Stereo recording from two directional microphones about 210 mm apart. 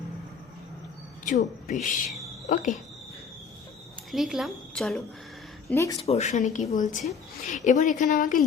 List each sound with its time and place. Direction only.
1.2 s a woman's voice: 40° left (ahead or behind)
4.1 s speech: centre (ahead or behind)
5.7 s speech: 15° left (ahead or behind)
6.0 s a woman's voice: 30° left (ahead or behind)